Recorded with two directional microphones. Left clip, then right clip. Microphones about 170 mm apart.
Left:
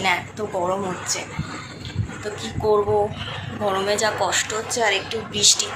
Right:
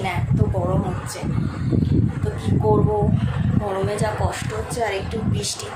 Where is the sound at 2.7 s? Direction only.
10° left (ahead or behind).